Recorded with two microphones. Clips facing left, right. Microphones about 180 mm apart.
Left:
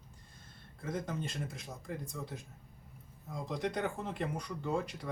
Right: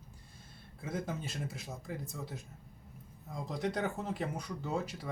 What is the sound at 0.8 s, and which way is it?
Speech, 5° right (ahead or behind).